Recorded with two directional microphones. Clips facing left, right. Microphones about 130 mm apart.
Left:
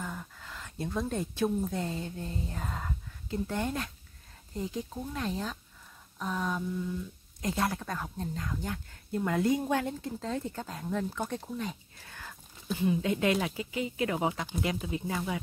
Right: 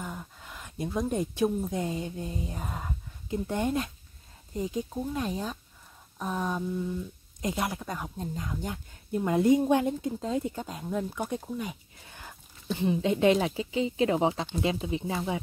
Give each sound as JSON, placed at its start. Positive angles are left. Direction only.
{"t": 0.0, "sound": "a woman's voice", "side_deg": -15}
{"t": 12.0, "sound": "a sound", "side_deg": -20}
{"t": 12.8, "sound": "speech", "side_deg": -25}